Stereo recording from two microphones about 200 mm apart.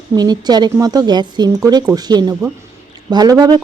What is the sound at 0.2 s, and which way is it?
A woman's voice, 20° right (ahead or behind).